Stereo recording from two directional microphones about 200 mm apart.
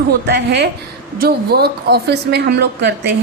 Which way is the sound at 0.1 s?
55° right (ahead or behind).